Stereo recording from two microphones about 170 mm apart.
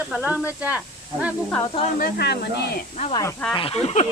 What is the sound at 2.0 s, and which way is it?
Speech, 75° left (ahead or behind).